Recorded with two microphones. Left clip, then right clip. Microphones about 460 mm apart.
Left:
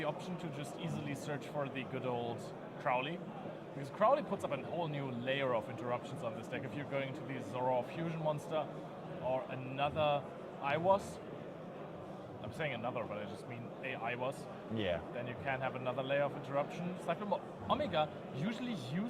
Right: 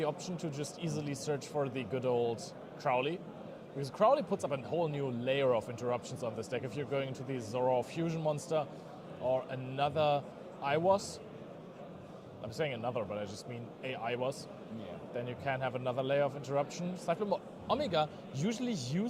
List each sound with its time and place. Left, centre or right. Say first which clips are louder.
0.8 s speech: right 3 dB; centre
12.5 s speech: right 4 dB; centre